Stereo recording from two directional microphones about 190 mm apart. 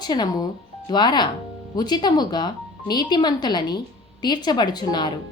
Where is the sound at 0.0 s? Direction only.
20° left (ahead or behind).